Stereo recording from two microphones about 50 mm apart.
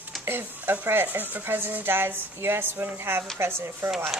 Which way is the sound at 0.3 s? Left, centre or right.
Right.